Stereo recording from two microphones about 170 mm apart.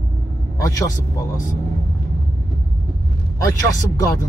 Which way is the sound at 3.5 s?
20° left (ahead or behind).